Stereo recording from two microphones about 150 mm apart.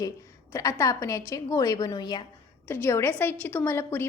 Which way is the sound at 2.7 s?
15° left (ahead or behind).